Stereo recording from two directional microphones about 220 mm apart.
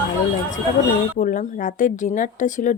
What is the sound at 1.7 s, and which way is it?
Speech, 35° left (ahead or behind).